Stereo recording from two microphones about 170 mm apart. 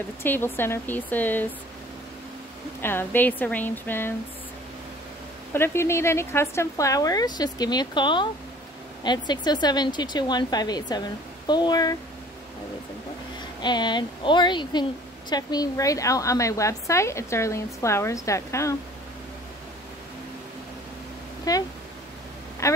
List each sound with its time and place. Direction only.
0.2 s speech: 15° left (ahead or behind)
2.8 s speech: 15° left (ahead or behind)
5.5 s a woman's voice: 15° left (ahead or behind)
13.6 s a woman's voice: 25° left (ahead or behind)
21.5 s a woman's voice: 20° left (ahead or behind)
22.6 s speech: 20° left (ahead or behind)